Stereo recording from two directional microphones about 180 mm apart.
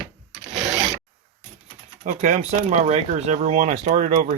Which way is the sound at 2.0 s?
40° right (ahead or behind).